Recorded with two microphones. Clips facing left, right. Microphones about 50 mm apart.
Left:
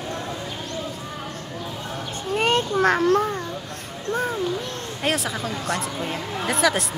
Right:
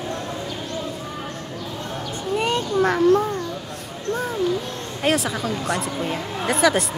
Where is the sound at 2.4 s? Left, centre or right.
Left.